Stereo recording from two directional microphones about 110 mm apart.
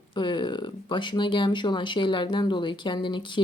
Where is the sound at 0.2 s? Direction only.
45° left (ahead or behind).